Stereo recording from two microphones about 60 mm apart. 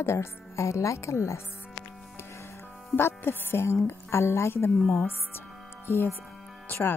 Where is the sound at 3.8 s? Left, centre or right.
Left.